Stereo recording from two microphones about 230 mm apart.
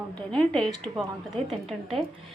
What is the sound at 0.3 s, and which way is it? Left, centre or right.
Speech, centre.